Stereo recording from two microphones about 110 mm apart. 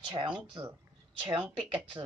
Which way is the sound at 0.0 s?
50° right (ahead or behind).